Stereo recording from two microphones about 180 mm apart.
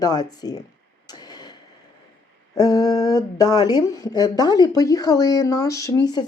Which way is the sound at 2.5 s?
20° left (ahead or behind).